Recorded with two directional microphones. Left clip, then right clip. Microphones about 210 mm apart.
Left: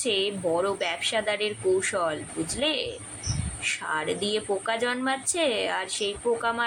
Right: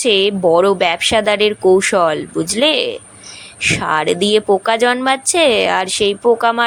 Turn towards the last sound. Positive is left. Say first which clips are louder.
# right 13 dB
turn(degrees=-45)  # may be behind; listen again after turning